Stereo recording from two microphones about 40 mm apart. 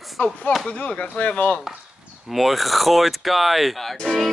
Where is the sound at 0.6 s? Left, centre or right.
Left.